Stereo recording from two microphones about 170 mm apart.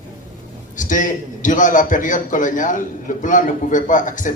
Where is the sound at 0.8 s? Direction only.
50° left (ahead or behind).